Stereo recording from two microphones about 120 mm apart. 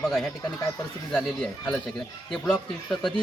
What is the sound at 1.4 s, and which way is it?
A man's voice, 10° left (ahead or behind).